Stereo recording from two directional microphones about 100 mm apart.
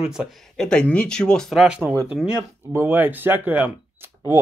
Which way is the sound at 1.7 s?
15° right (ahead or behind).